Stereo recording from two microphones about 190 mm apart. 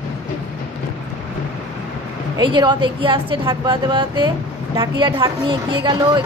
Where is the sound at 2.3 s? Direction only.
25° right (ahead or behind).